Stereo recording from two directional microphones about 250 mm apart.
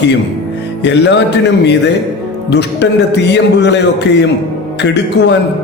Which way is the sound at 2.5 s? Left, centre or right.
Left.